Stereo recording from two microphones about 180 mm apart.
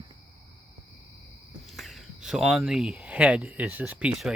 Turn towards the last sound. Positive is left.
turn(degrees=-5)  # may be behind; listen again after turning